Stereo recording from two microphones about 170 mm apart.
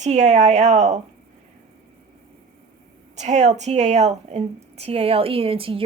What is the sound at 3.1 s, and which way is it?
A woman's voice, 40° right (ahead or behind).